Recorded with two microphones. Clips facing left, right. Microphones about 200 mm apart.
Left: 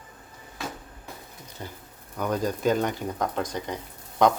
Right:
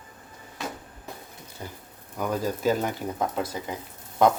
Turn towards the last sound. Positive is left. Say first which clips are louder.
# even
turn(degrees=-5)  # may be behind; listen again after turning